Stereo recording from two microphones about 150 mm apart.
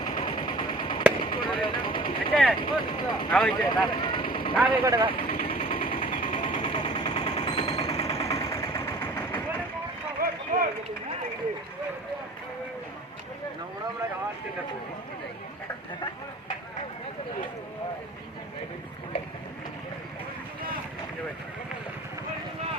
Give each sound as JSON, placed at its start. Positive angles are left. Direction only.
{"t": 0.0, "sound": "a sound", "side_deg": 30}
{"t": 1.2, "sound": "vehicle", "side_deg": 35}
{"t": 2.3, "sound": "speech", "side_deg": 5}
{"t": 2.6, "sound": "speech", "side_deg": 30}
{"t": 3.8, "sound": "vehicle", "side_deg": 30}
{"t": 4.9, "sound": "speech", "side_deg": -30}
{"t": 5.1, "sound": "vehicle", "side_deg": 40}
{"t": 6.6, "sound": "a sound", "side_deg": 35}
{"t": 8.0, "sound": "sewing machine", "side_deg": 45}
{"t": 8.3, "sound": "vehicle", "side_deg": 20}
{"t": 10.2, "sound": "run", "side_deg": -70}